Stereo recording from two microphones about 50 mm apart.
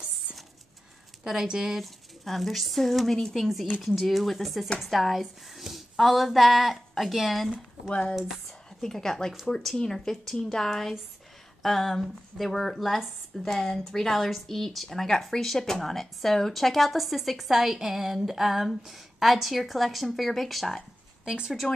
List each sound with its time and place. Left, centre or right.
1.2 s speech: centre
7.9 s speech: left
8.8 s speech: centre
21.3 s speech: centre